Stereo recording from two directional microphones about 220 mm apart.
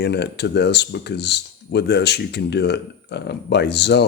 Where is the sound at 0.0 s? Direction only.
50° left (ahead or behind).